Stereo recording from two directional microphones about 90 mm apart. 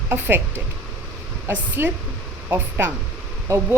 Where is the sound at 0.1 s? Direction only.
25° right (ahead or behind).